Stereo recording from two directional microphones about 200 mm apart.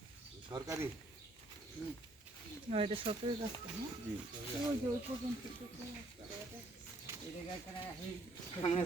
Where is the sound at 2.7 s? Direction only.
30° right (ahead or behind).